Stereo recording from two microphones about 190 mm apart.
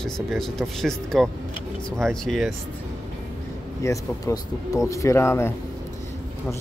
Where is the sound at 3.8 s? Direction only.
15° left (ahead or behind).